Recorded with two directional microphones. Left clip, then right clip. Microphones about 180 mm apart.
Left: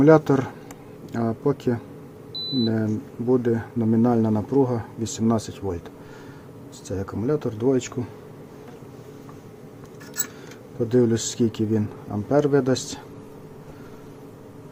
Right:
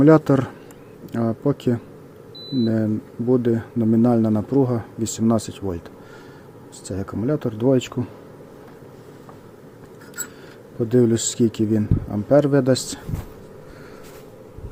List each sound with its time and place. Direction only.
0.0 s speech: 25° right (ahead or behind)
6.8 s speech: 25° right (ahead or behind)
10.8 s speech: 25° right (ahead or behind)